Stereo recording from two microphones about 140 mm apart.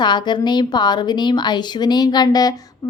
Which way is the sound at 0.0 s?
30° left (ahead or behind).